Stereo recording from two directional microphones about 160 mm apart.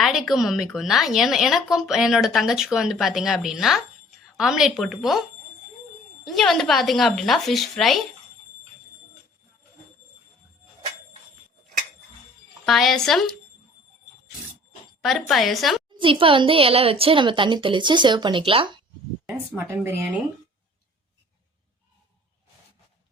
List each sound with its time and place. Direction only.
0.0 s a woman's voice: centre (ahead or behind)
6.2 s a woman's voice: centre (ahead or behind)
12.6 s a woman's voice: centre (ahead or behind)
15.3 s a woman's voice: centre (ahead or behind)
16.0 s a woman's voice: 35° right (ahead or behind)
19.5 s speech: 15° right (ahead or behind)